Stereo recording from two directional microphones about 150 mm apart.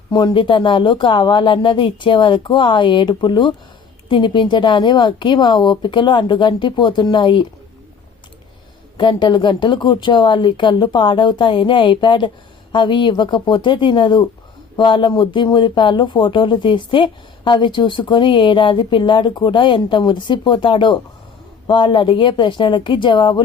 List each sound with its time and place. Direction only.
0.1 s speech: 30° left (ahead or behind)
9.0 s speech: 30° left (ahead or behind)